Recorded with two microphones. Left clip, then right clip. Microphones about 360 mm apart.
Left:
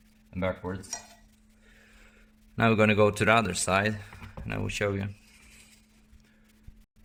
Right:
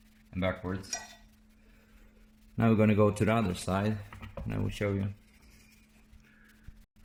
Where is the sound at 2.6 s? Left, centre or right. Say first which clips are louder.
Left 4 dB; left.